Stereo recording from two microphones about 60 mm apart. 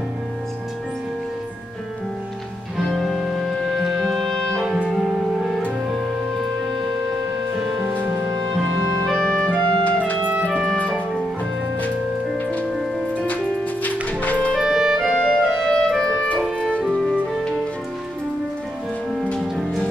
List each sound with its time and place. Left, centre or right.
2.9 s music: centre
4.6 s music: centre
7.8 s music: right
9.0 s music: centre
9.6 s clarinet: left
10.2 s music: right
10.8 s music: centre
13.8 s music: left
14.6 s music: centre
15.2 s clarinet: centre
17.0 s music: centre